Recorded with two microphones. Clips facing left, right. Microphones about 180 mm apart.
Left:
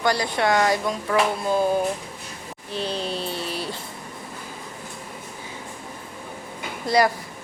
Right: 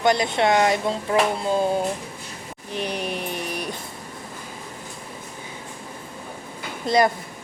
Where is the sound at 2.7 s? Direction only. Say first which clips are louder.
Even; 15° right (ahead or behind).